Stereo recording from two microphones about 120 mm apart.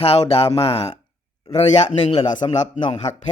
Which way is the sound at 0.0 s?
55° left (ahead or behind).